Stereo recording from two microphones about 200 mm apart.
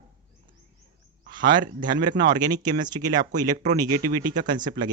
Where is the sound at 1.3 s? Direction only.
25° right (ahead or behind).